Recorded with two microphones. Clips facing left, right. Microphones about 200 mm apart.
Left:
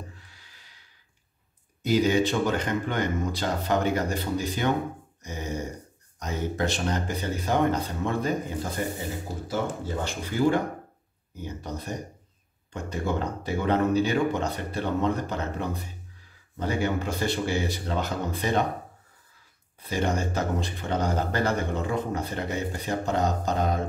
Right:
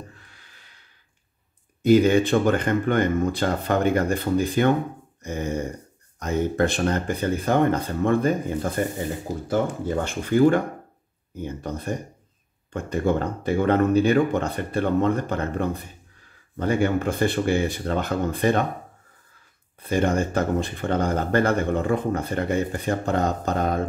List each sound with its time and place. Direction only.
1.8 s speech: 55° right (ahead or behind)
10.0 s speech: 55° right (ahead or behind)
19.8 s speech: 55° right (ahead or behind)